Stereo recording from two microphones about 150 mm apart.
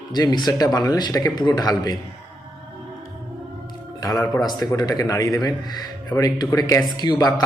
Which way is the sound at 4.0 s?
25° left (ahead or behind).